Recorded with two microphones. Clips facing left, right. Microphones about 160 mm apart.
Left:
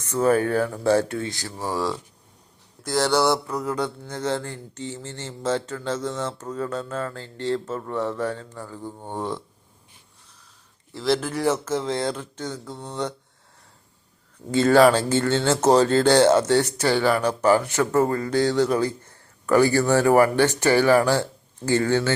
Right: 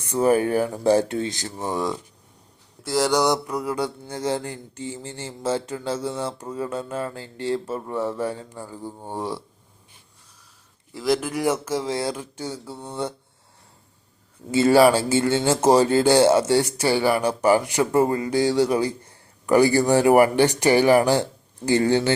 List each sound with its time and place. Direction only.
0.0 s speech: 10° right (ahead or behind)
2.8 s speech: 10° right (ahead or behind)
10.9 s speech: 10° right (ahead or behind)
14.5 s speech: 10° right (ahead or behind)